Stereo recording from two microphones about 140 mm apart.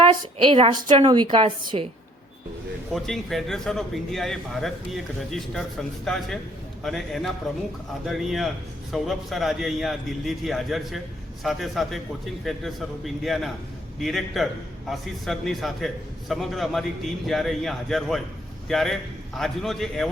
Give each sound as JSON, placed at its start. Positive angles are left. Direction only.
{"t": 0.1, "sound": "a woman's voice", "side_deg": -40}
{"t": 2.9, "sound": "a man's voice", "side_deg": 0}